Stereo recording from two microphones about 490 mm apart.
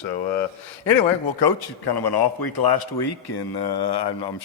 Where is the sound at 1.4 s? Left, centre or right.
Left.